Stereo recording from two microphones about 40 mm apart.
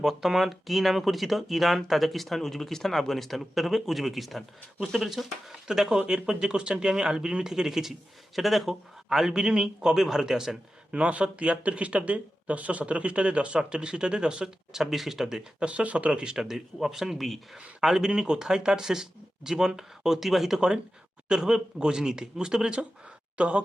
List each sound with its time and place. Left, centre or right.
0.0 s speech: centre
10.9 s speech: right; by 15.4 s centre
15.6 s speech: right
16.1 s speech: centre
18.1 s speech: centre
21.2 s speech: centre